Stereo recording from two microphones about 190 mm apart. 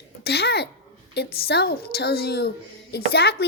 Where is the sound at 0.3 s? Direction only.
60° left (ahead or behind).